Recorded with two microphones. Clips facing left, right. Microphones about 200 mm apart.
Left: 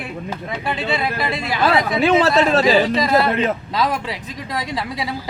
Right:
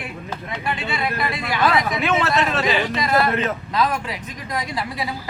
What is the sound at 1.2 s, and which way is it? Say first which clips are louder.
A man's voice: left 1 dB; 25° left (ahead or behind).